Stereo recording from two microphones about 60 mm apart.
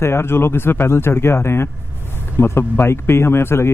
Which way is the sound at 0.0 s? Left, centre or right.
Left.